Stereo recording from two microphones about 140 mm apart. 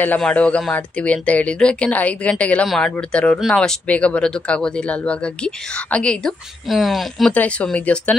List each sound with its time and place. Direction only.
0.0 s speech: 10° left (ahead or behind)